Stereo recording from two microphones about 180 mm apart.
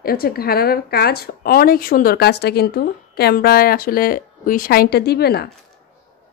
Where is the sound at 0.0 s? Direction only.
55° left (ahead or behind).